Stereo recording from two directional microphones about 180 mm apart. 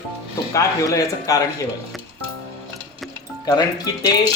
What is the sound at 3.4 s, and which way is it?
Speech, 20° left (ahead or behind).